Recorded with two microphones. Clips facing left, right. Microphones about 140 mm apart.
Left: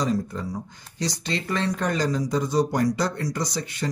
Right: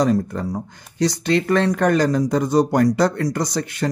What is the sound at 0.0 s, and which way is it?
Speech, 60° right (ahead or behind).